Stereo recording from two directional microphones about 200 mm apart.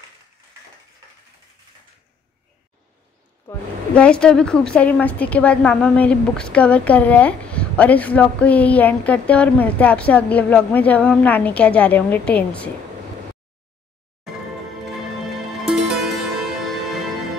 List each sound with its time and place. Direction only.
3.4 s speech: 5° left (ahead or behind)
15.6 s music: centre (ahead or behind)